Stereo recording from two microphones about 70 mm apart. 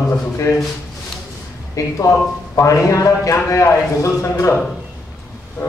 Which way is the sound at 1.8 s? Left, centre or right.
Left.